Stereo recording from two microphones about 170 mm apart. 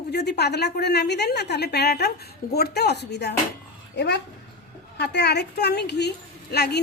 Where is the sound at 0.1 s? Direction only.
75° left (ahead or behind).